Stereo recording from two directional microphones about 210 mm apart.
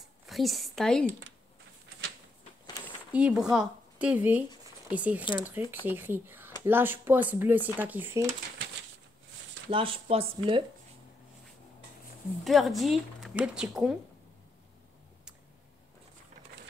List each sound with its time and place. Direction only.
0.0 s a sound: centre (ahead or behind)
3.1 s speech: 5° right (ahead or behind)
5.2 s speech: 20° left (ahead or behind)
5.9 s speech: 10° right (ahead or behind)
9.7 s speech: 25° right (ahead or behind)
12.4 s speech: centre (ahead or behind)